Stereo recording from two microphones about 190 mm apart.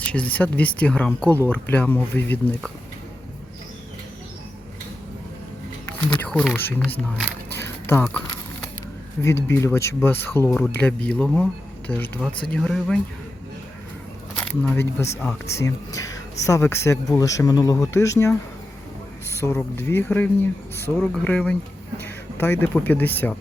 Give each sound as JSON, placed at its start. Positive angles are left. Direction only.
{"t": 0.0, "sound": "speech", "side_deg": 5}
{"t": 6.1, "sound": "speech", "side_deg": 5}
{"t": 7.5, "sound": "a sound", "side_deg": 15}
{"t": 9.2, "sound": "speech", "side_deg": 15}
{"t": 14.3, "sound": "speech", "side_deg": 10}
{"t": 19.4, "sound": "speech", "side_deg": 10}